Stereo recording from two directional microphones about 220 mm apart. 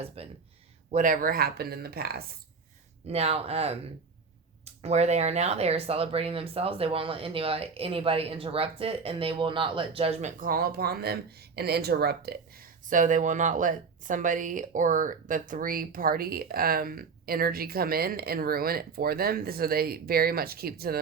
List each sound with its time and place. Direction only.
0.2 s speech: 25° right (ahead or behind); by 2.2 s 45° right (ahead or behind)
3.1 s speech: 30° right (ahead or behind); by 21.0 s 45° right (ahead or behind)